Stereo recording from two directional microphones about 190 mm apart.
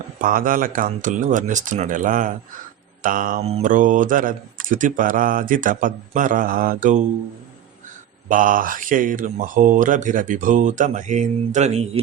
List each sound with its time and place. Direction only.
0.2 s speech: 45° right (ahead or behind)
8.3 s speech: 45° right (ahead or behind)